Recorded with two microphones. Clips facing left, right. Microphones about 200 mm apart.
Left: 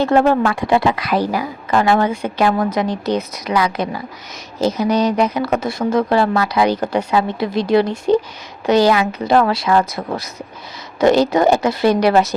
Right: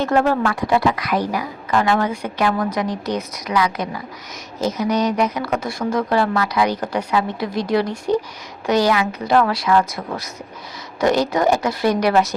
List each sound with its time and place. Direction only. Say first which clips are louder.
0.0 s a woman's voice: left 4 dB; 25° left (ahead or behind)